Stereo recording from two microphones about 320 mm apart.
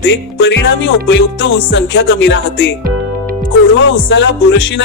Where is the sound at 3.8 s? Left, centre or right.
Left.